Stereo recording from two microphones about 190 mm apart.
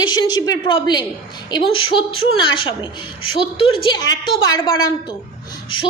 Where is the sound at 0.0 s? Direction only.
20° left (ahead or behind).